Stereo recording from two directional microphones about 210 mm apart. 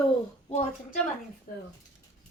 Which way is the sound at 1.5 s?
45° left (ahead or behind).